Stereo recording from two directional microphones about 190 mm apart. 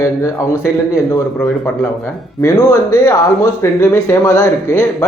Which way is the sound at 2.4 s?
15° left (ahead or behind).